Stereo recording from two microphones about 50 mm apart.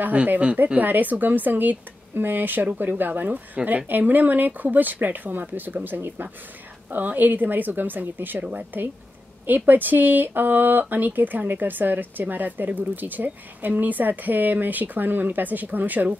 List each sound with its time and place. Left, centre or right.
0.0 s speech: right
9.5 s speech: right